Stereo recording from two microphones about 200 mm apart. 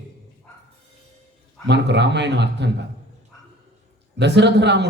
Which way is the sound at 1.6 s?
60° right (ahead or behind).